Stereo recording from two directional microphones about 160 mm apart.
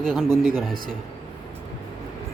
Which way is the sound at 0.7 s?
65° right (ahead or behind).